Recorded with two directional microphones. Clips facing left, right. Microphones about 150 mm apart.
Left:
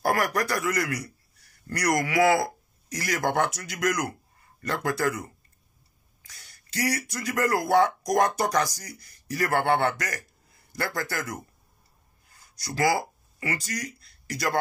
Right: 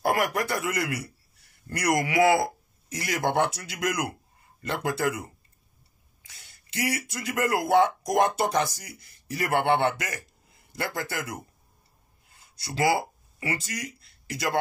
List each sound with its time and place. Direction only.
0.0 s a man's voice: 20° right (ahead or behind)
12.3 s a sound: 25° right (ahead or behind)
13.4 s speech: 25° right (ahead or behind)